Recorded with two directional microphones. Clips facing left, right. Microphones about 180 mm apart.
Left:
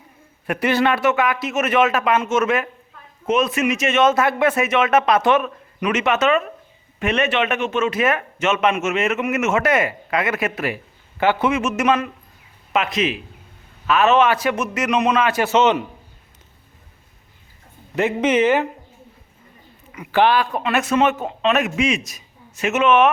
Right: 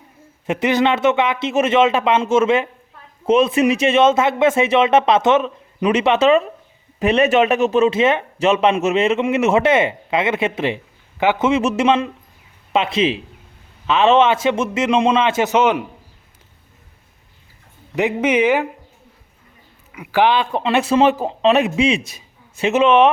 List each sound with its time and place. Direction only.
0.4 s speech: 20° right (ahead or behind)
17.9 s speech: 15° right (ahead or behind)
19.9 s speech: 10° right (ahead or behind); by 23.1 s 30° right (ahead or behind)